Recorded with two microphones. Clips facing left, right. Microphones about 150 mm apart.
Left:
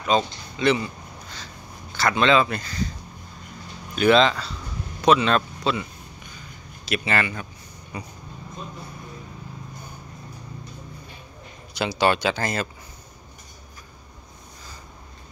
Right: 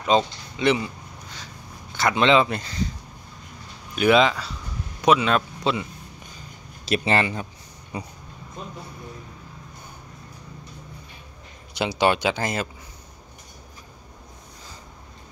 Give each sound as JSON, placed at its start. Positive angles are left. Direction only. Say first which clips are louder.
{"t": 0.0, "sound": "a sound", "louder": "right 2 dB", "side_deg": -20}
{"t": 3.9, "sound": "speech", "louder": "even", "side_deg": -10}
{"t": 6.9, "sound": "speech", "louder": "right 3 dB", "side_deg": -30}
{"t": 11.7, "sound": "speech", "louder": "even", "side_deg": -20}